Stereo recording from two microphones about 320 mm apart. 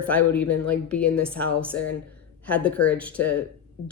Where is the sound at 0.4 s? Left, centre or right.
Left.